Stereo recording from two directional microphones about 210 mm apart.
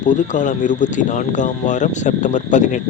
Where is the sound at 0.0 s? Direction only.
35° left (ahead or behind).